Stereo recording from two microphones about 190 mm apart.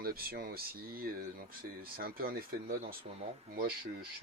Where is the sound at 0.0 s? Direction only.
50° right (ahead or behind).